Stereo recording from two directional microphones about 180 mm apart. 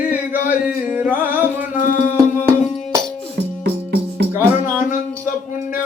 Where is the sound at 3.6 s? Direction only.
70° right (ahead or behind).